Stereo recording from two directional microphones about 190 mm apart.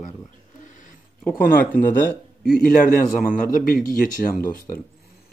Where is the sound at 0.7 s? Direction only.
45° left (ahead or behind).